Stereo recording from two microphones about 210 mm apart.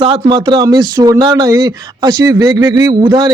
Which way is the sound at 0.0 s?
20° right (ahead or behind).